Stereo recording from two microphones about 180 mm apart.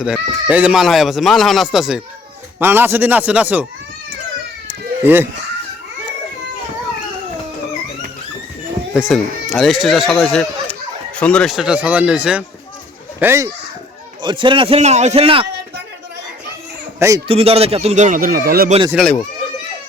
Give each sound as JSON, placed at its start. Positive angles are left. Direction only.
{"t": 0.0, "sound": "a man's voice", "side_deg": -5}
{"t": 4.7, "sound": "baby cry", "side_deg": -10}
{"t": 8.9, "sound": "speech", "side_deg": 0}
{"t": 14.2, "sound": "a man's voice", "side_deg": -25}
{"t": 17.2, "sound": "speech", "side_deg": -30}